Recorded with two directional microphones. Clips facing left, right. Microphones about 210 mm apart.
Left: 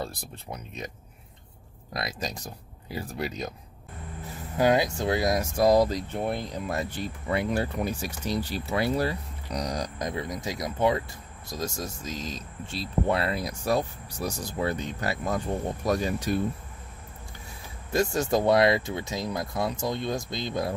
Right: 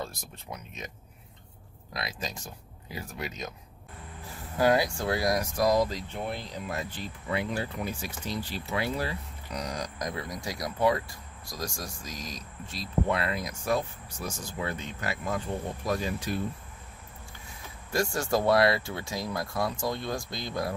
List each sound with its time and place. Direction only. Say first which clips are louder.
0.0 s speech: left 3 dB; 35° left (ahead or behind)
2.0 s speech: left 3 dB; 40° left (ahead or behind)
4.6 s speech: left 2 dB; 20° left (ahead or behind); by 16.3 s 40° left (ahead or behind)
17.9 s speech: left 3 dB; 20° left (ahead or behind)